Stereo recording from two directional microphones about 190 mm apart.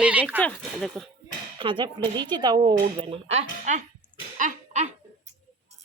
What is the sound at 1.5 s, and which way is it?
Speech, 25° right (ahead or behind).